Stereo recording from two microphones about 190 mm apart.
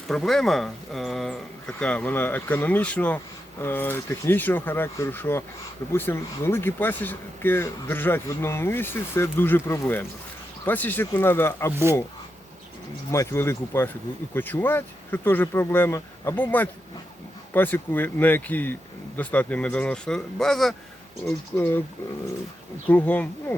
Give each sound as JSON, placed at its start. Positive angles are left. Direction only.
{"t": 0.1, "sound": "speech", "side_deg": 0}
{"t": 13.1, "sound": "speech", "side_deg": 15}
{"t": 22.9, "sound": "speech", "side_deg": 10}